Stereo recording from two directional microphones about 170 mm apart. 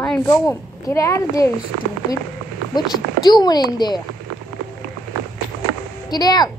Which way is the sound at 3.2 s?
25° left (ahead or behind).